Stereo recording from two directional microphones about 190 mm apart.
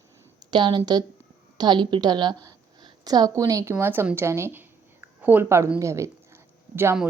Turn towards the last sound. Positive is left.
turn(degrees=-10)  # may be behind; listen again after turning